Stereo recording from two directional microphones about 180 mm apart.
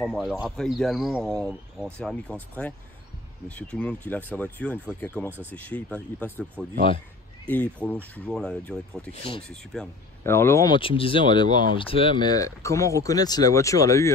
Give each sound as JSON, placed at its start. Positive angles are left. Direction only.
{"t": 0.0, "sound": "speech", "side_deg": 0}
{"t": 1.5, "sound": "speech", "side_deg": -5}
{"t": 2.0, "sound": "speech", "side_deg": 5}
{"t": 3.4, "sound": "speech", "side_deg": 5}
{"t": 7.4, "sound": "speech", "side_deg": 10}
{"t": 9.1, "sound": "speech", "side_deg": 30}
{"t": 9.5, "sound": "speech", "side_deg": 5}
{"t": 10.2, "sound": "speech", "side_deg": 15}